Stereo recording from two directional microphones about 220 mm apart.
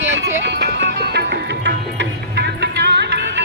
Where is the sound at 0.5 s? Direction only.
50° right (ahead or behind).